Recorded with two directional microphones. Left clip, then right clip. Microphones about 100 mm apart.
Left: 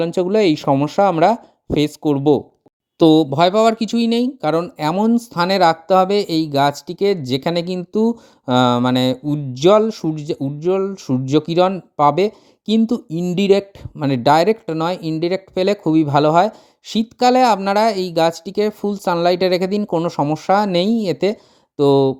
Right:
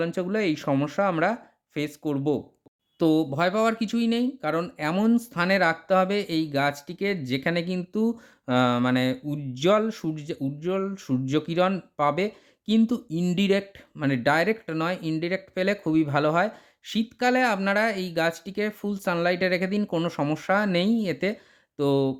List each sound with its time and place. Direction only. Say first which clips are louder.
0.0 s speech: left 10 dB; 55° left (ahead or behind)
3.0 s speech: left 10 dB; 70° left (ahead or behind)
4.9 s speech: left 6 dB; 40° left (ahead or behind)
9.2 s speech: left 9 dB; 40° left (ahead or behind)
14.0 s speech: left 9 dB; 50° left (ahead or behind)